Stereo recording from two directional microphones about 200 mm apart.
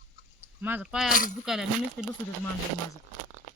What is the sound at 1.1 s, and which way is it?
Speech, 45° left (ahead or behind).